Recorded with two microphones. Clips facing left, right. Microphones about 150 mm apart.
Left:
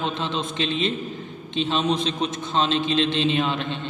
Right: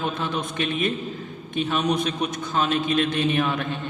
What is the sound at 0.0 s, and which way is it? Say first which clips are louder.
Speech: even; 20° left (ahead or behind).